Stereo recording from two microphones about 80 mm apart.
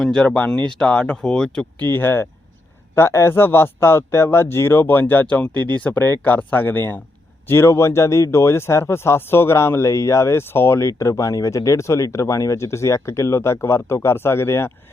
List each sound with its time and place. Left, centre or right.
0.0 s speech: centre
1.9 s a man's voice: left